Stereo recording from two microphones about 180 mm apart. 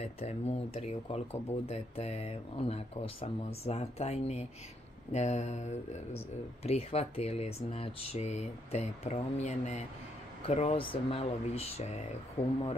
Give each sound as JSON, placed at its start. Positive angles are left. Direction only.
{"t": 0.0, "sound": "speech", "side_deg": 35}